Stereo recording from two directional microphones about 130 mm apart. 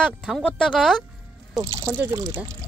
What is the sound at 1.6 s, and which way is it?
Speech, 20° right (ahead or behind).